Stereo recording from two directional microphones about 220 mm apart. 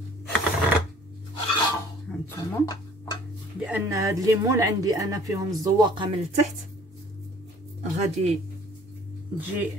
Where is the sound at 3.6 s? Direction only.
5° right (ahead or behind).